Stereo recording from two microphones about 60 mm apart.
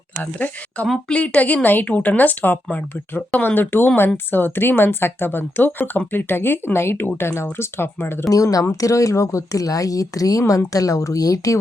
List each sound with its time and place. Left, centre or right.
0.2 s a woman's voice: left
8.3 s speech: left
8.7 s speech: left